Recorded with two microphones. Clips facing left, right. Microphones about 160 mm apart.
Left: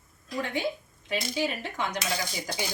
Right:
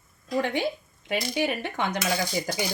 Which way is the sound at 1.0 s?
60° right (ahead or behind).